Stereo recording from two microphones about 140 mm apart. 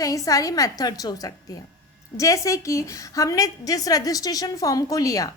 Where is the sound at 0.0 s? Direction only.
25° left (ahead or behind).